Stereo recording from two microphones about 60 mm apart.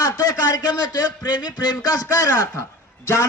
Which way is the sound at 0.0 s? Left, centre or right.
Left.